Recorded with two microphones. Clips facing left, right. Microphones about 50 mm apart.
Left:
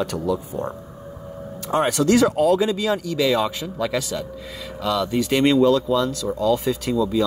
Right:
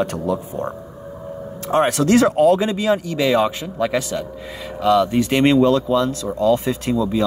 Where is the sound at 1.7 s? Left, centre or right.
Right.